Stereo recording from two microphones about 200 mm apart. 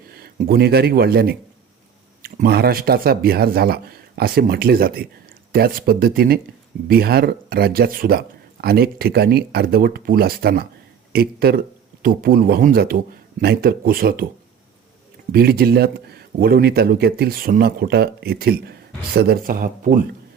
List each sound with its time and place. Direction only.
0.1 s speech: 50° right (ahead or behind)
15.3 s speech: 50° right (ahead or behind)